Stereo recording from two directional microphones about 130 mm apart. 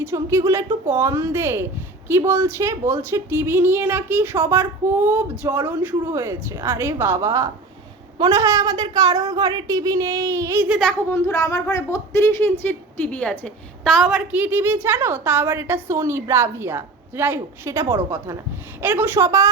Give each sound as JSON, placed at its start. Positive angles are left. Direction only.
{"t": 0.0, "sound": "a woman's voice", "side_deg": -20}
{"t": 10.7, "sound": "a child's voice", "side_deg": 5}
{"t": 11.1, "sound": "a woman's voice", "side_deg": 25}